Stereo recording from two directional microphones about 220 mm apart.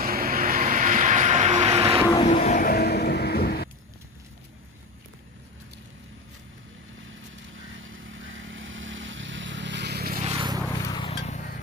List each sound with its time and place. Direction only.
0.0 s vehicle: 40° right (ahead or behind)
2.2 s vehicle: 30° left (ahead or behind)
7.5 s vehicle: 60° right (ahead or behind); by 10.3 s 35° right (ahead or behind)
10.3 s a sound: 20° right (ahead or behind)
10.6 s vehicle: 15° left (ahead or behind); by 11.6 s 35° left (ahead or behind)